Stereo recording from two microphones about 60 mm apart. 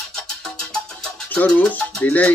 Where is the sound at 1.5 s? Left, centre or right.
Left.